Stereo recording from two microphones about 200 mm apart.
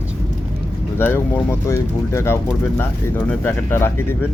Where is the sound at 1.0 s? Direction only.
10° left (ahead or behind).